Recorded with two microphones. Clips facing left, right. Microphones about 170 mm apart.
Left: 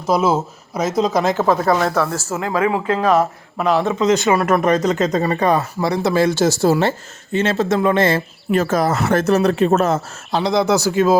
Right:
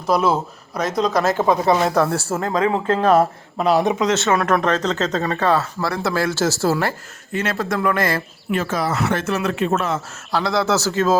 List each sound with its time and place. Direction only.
0.0 s speech: centre (ahead or behind); by 1.9 s 20° right (ahead or behind)
2.6 s speech: 10° left (ahead or behind)
3.1 s speech: 30° right (ahead or behind)
3.7 s speech: 15° right (ahead or behind)
4.3 s speech: 5° left (ahead or behind); by 8.2 s 25° left (ahead or behind)
8.5 s speech: 45° left (ahead or behind)
10.3 s speech: 20° left (ahead or behind)